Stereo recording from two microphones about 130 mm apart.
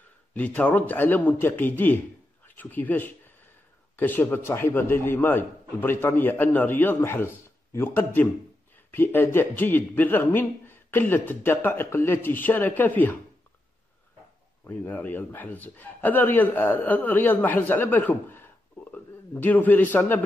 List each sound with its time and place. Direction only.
0.3 s a man's voice: 10° left (ahead or behind)
14.7 s a man's voice: 15° left (ahead or behind)